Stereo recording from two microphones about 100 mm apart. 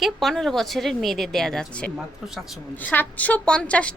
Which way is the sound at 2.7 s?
20° left (ahead or behind).